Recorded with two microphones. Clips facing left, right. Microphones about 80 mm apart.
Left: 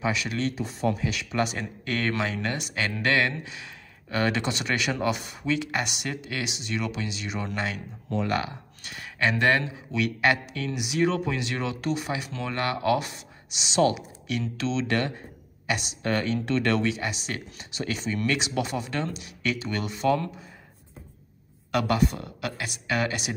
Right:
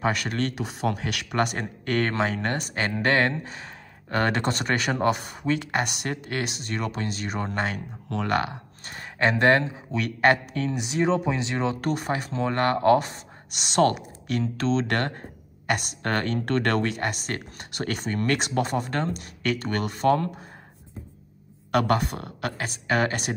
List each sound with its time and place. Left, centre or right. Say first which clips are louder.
0.0 s speech: right 2 dB; right
8.2 s speech: right 2 dB; right
8.8 s speech: right 3 dB; right
11.8 s speech: right 2 dB; right
13.5 s speech: right 2 dB; right
21.7 s speech: right 1 dB; right